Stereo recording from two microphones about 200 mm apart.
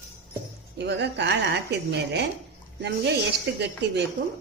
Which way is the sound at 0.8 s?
60° right (ahead or behind).